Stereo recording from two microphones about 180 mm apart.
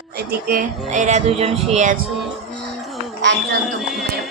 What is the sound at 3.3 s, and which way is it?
Speech, 80° right.